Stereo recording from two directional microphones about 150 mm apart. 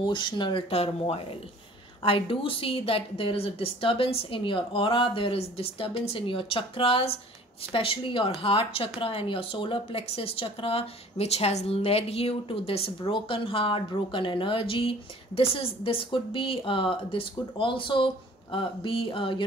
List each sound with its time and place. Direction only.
0.0 s speech: 30° left (ahead or behind)